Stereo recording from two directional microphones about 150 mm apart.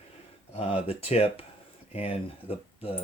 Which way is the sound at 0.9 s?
45° left (ahead or behind).